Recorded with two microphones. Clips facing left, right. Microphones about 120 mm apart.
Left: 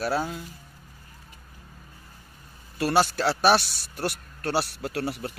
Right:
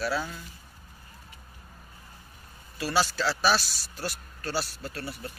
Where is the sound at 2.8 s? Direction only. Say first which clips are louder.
Left 4 dB; 55° left (ahead or behind).